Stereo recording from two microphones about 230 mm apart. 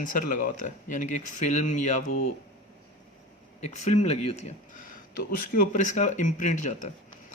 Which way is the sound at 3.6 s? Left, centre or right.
Left.